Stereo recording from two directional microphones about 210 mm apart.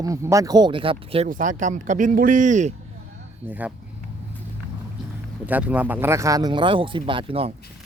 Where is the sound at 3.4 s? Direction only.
10° right (ahead or behind).